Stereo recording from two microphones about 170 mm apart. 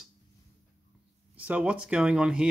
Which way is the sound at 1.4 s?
5° right (ahead or behind).